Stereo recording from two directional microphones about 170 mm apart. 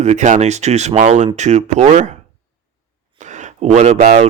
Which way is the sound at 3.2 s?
45° right (ahead or behind).